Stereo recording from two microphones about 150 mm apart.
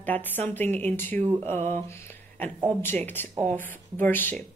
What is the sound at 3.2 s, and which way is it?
A woman's voice, 15° left (ahead or behind).